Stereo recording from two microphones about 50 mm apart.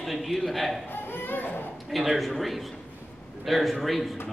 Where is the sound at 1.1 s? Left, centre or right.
Left.